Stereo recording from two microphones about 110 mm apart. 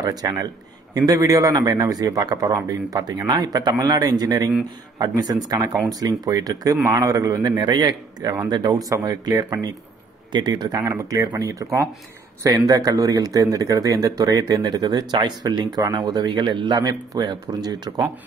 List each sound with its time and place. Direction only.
0.0 s speech: 35° right (ahead or behind)